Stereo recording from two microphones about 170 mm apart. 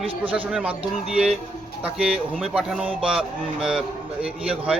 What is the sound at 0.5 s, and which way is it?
A man's voice, 5° right (ahead or behind).